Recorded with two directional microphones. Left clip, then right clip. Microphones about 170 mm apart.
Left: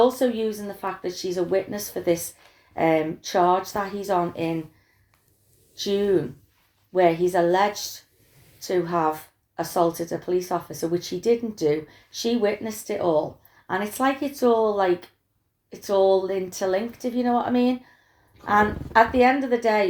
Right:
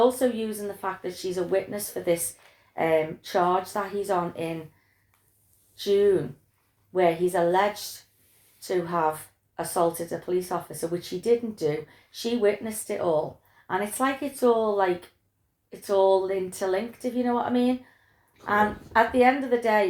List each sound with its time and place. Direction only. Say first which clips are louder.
0.2 s speech: left 3 dB; 50° left (ahead or behind)
5.7 s speech: right 1 dB; 50° left (ahead or behind)